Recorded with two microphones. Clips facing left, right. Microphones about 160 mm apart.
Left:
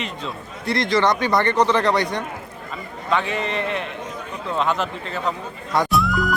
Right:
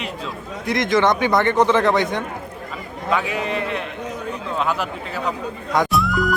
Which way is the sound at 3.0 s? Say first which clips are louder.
Right 1 dB; 5° right (ahead or behind).